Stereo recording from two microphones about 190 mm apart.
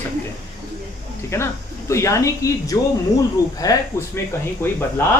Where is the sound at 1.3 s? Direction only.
15° left (ahead or behind).